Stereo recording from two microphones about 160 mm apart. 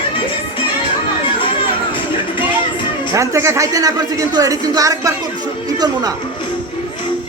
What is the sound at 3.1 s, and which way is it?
Speech, 20° right (ahead or behind).